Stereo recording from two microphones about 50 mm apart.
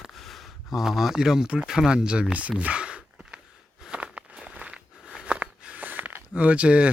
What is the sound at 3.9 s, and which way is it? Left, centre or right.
Walk, centre.